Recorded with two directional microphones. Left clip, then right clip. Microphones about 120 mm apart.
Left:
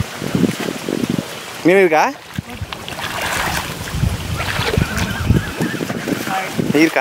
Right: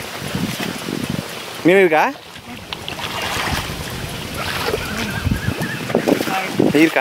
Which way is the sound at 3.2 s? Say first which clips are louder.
Left 2 dB; 30° left (ahead or behind).